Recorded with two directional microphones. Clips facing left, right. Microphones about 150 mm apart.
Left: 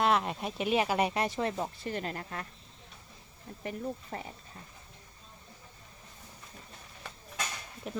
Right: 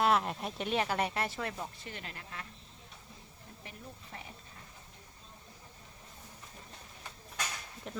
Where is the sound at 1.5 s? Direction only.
35° left (ahead or behind).